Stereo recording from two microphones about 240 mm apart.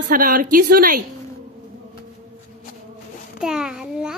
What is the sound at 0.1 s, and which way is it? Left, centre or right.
Speech, right.